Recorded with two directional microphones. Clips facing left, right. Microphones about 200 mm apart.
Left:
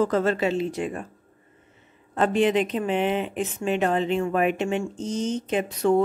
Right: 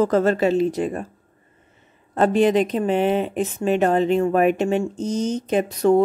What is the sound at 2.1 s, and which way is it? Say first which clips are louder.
A woman's voice: right 4 dB; 40° right (ahead or behind).